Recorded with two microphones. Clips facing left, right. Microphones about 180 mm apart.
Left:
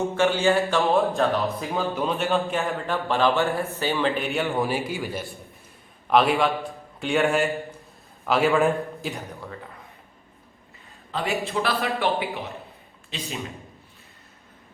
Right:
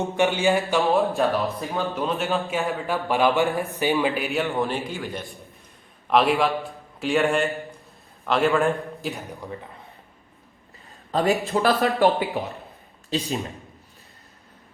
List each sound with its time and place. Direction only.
0.0 s mantra: 15° right (ahead or behind)
0.8 s a man's voice: centre (ahead or behind)
9.3 s mantra: 15° right (ahead or behind)
11.1 s a man's voice: 40° right (ahead or behind)